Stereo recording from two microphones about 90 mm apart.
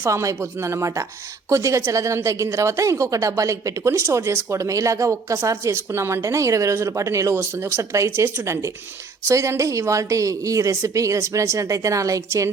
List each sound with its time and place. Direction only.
0.0 s speech: 35° right (ahead or behind)